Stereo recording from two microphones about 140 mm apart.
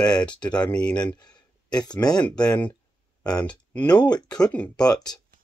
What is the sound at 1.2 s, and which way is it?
Speech, 30° left (ahead or behind).